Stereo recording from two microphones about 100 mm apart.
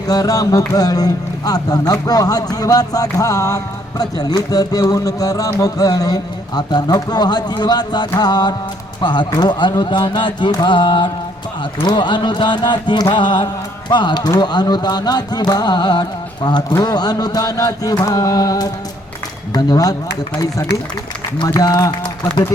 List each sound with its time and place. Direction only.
0.1 s speech: 35° left (ahead or behind)
8.2 s carnatic music: 45° left (ahead or behind)
18.0 s speech: 35° left (ahead or behind)
21.4 s speech: 40° left (ahead or behind)